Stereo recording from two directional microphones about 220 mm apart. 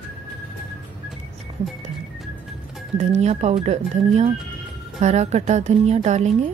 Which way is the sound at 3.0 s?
30° right (ahead or behind).